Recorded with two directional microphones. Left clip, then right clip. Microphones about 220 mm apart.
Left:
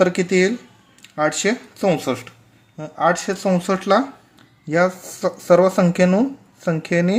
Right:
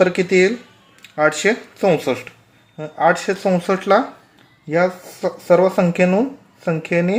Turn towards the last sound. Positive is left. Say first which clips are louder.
# right 1 dB
turn(degrees=15)  # may be behind; listen again after turning